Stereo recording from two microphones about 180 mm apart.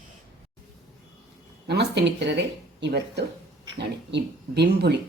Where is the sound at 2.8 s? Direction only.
70° right (ahead or behind).